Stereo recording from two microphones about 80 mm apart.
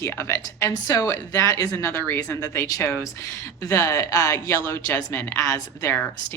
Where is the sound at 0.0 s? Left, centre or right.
Left.